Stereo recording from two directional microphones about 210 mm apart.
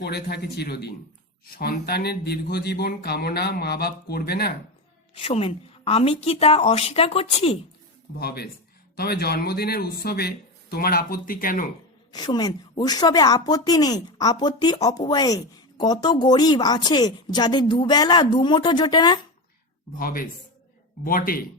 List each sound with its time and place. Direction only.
0.0 s speech: 50° left (ahead or behind)
5.1 s a woman's voice: 25° left (ahead or behind)
8.2 s speech: 45° left (ahead or behind)
12.1 s a woman's voice: 20° left (ahead or behind)
20.0 s speech: 45° left (ahead or behind)